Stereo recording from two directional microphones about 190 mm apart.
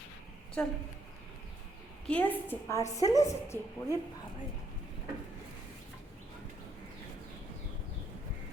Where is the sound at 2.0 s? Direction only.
10° left (ahead or behind).